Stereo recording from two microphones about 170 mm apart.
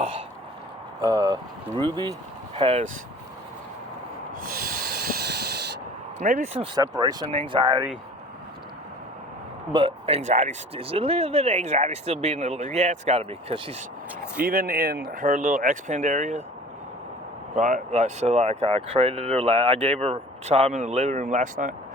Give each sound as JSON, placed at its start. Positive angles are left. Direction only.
{"t": 1.0, "sound": "speech", "side_deg": -25}
{"t": 4.4, "sound": "sanding", "side_deg": -60}
{"t": 6.2, "sound": "speech", "side_deg": -50}
{"t": 6.6, "sound": "speech", "side_deg": -25}
{"t": 9.7, "sound": "speech", "side_deg": -35}
{"t": 14.4, "sound": "speech", "side_deg": -55}
{"t": 17.5, "sound": "speech", "side_deg": -45}